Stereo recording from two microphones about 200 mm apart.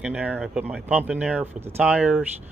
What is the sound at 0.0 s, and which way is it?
Speech, 5° right (ahead or behind).